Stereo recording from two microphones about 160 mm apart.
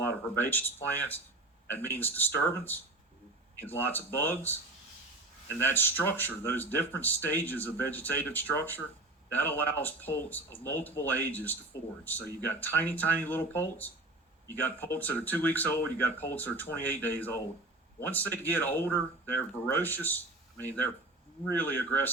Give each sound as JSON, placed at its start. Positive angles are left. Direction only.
{"t": 0.0, "sound": "speech", "side_deg": 10}
{"t": 5.5, "sound": "speech", "side_deg": 15}